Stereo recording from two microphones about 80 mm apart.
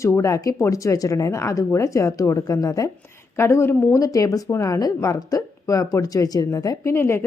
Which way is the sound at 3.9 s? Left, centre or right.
Left.